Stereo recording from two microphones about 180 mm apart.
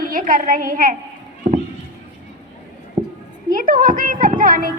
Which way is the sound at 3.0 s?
35° right (ahead or behind).